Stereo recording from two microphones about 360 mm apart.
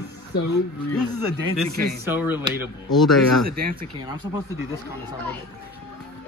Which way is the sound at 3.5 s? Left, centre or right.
Right.